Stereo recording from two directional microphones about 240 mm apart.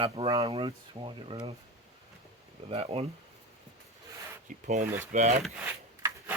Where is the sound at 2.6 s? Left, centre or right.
Right.